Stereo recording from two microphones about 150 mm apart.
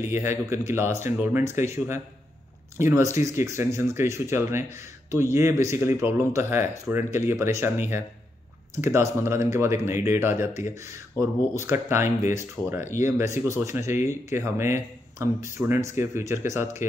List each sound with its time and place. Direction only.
0.1 s speech: 15° right (ahead or behind)
2.8 s speech: 20° right (ahead or behind)